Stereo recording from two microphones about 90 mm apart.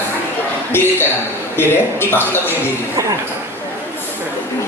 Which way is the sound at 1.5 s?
25° left (ahead or behind).